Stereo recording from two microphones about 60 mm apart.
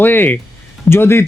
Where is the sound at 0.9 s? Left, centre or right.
Left.